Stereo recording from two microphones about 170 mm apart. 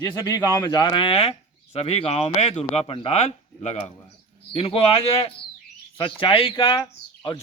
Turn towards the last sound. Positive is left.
turn(degrees=25)  # may be behind; listen again after turning